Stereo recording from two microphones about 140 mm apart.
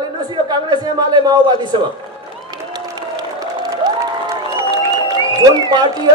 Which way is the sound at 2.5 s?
30° right (ahead or behind).